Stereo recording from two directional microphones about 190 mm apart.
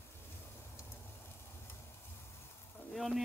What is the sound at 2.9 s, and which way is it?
Frying, centre (ahead or behind).